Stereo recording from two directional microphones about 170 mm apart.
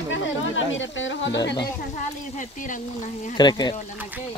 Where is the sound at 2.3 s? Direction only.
50° left (ahead or behind).